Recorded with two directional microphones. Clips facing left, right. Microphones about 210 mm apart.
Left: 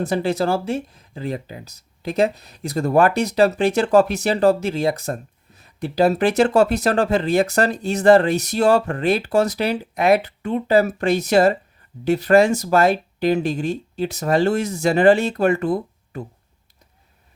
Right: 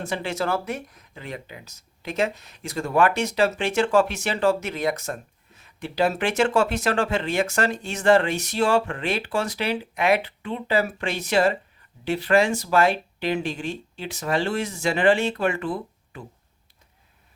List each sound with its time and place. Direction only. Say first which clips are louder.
0.0 s speech: left 7 dB; 35° left (ahead or behind)